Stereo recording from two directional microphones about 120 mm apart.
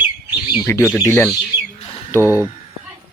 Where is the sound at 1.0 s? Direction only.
15° left (ahead or behind).